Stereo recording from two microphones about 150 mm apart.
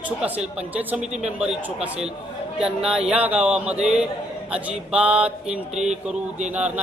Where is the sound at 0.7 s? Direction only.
10° right (ahead or behind).